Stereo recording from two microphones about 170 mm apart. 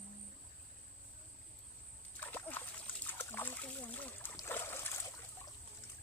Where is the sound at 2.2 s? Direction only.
10° left (ahead or behind).